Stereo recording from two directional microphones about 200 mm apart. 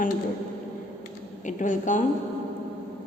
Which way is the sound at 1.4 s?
40° left (ahead or behind).